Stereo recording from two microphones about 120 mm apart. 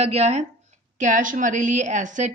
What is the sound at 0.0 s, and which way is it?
Speech, 65° right (ahead or behind).